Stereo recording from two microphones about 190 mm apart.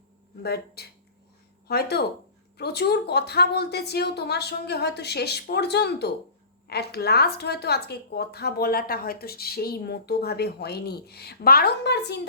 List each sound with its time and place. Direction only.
0.4 s a woman's voice: 60° left (ahead or behind)